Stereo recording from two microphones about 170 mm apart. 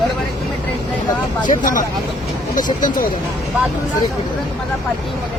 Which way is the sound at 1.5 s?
50° left (ahead or behind).